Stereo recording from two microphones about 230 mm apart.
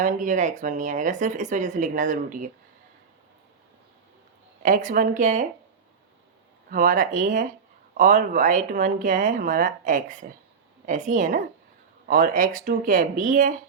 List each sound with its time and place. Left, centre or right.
0.0 s speech: right
4.6 s speech: right
6.7 s speech: right